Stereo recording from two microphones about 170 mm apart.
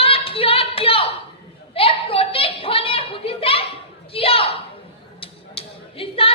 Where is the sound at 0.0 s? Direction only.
35° left (ahead or behind).